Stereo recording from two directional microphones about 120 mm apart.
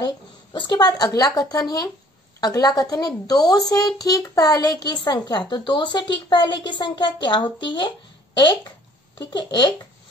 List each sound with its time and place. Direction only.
0.0 s a woman's voice: 35° left (ahead or behind)
9.2 s a woman's voice: 35° left (ahead or behind)